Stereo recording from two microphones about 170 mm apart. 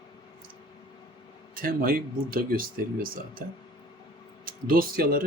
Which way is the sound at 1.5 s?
60° right (ahead or behind).